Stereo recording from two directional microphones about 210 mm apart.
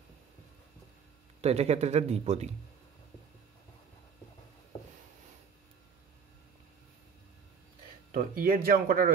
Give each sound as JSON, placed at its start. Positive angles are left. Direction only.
{"t": 1.4, "sound": "speech", "side_deg": -30}
{"t": 8.1, "sound": "speech", "side_deg": -45}